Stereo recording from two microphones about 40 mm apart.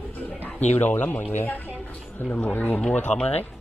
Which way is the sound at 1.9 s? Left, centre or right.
Left.